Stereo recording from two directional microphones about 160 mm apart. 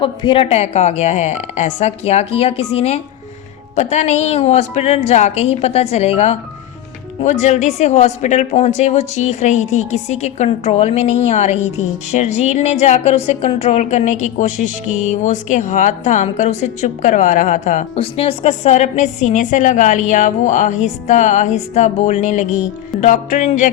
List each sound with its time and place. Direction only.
0.0 s a woman's voice: 30° left (ahead or behind); by 18.0 s 50° left (ahead or behind)
18.0 s a woman's voice: 40° left (ahead or behind)